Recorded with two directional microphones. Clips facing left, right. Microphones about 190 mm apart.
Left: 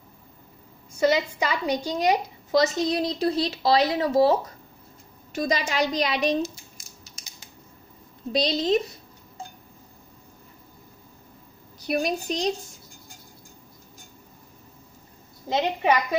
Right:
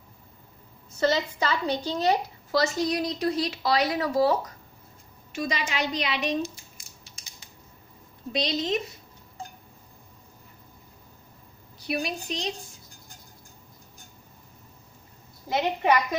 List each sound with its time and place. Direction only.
0.9 s a woman's voice: 10° left (ahead or behind)
5.3 s a woman's voice: 40° left (ahead or behind)
7.1 s scissors: 40° left (ahead or behind)
8.3 s a woman's voice: 35° left (ahead or behind)
11.8 s a woman's voice: 45° left (ahead or behind)
15.4 s a woman's voice: 20° left (ahead or behind)